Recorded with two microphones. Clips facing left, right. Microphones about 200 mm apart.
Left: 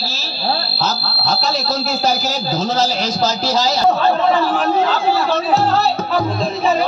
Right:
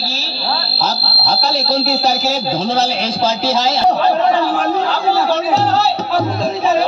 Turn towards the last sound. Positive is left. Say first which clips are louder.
# right 1 dB
turn(degrees=-85)